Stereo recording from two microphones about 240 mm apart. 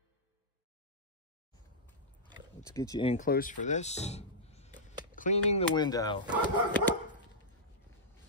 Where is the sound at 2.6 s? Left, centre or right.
Centre.